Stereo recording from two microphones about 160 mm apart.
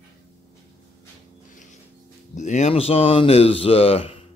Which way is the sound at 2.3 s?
50° left (ahead or behind).